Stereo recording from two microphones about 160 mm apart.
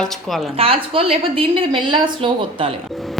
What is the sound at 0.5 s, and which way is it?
A woman's voice, 35° right (ahead or behind).